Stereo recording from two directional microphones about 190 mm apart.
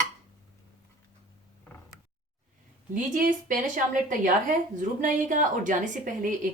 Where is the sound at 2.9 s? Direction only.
45° right (ahead or behind).